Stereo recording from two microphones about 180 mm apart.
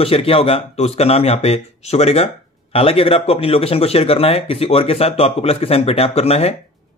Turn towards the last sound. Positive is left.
turn(degrees=35)  # may be behind; listen again after turning